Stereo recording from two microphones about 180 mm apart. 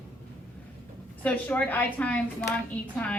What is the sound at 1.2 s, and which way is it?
A woman's voice, 10° left (ahead or behind).